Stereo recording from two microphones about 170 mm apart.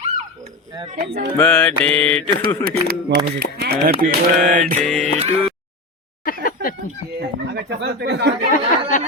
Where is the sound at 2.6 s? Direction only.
60° right (ahead or behind).